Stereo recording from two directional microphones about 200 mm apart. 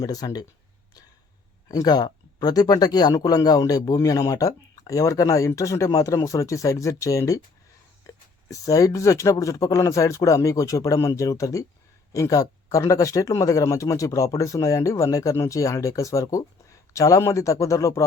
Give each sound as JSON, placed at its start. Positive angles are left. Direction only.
{"t": 0.0, "sound": "speech", "side_deg": 20}
{"t": 1.6, "sound": "speech", "side_deg": 20}